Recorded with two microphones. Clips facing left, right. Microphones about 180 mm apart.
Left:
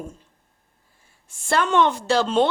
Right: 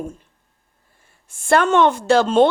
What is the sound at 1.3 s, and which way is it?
A woman's voice, 55° right (ahead or behind).